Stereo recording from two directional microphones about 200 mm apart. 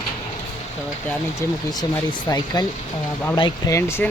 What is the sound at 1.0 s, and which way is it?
Speech, 15° left (ahead or behind).